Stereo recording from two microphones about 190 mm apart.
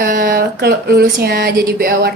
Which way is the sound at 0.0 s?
45° right (ahead or behind).